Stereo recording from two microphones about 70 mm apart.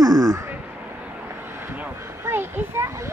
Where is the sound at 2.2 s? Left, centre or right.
Right.